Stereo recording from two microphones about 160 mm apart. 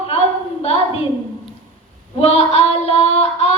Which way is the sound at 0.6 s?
40° left (ahead or behind).